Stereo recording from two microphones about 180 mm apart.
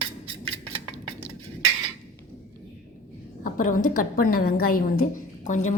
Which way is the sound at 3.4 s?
50° left (ahead or behind).